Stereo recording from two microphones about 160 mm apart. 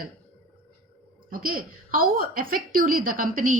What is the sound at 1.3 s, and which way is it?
A woman's voice, 65° right (ahead or behind).